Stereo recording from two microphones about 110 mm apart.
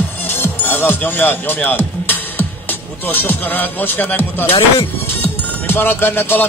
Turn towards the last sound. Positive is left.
turn(degrees=20)  # may be behind; listen again after turning